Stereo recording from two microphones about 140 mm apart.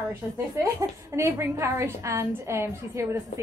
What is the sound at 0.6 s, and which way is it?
A woman's voice, 20° right (ahead or behind).